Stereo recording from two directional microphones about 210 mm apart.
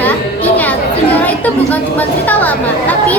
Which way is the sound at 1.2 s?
10° left (ahead or behind).